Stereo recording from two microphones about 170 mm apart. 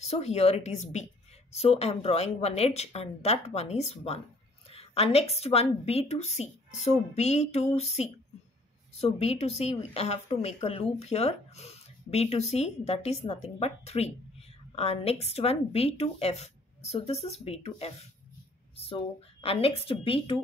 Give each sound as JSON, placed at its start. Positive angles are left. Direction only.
{"t": 0.0, "sound": "speech", "side_deg": 40}
{"t": 19.4, "sound": "speech", "side_deg": 35}